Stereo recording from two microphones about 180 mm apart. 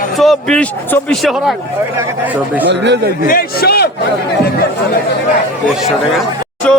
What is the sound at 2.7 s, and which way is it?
Speech, 70° right (ahead or behind).